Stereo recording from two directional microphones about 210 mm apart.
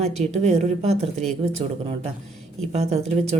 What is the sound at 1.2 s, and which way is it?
Speech, 5° left (ahead or behind).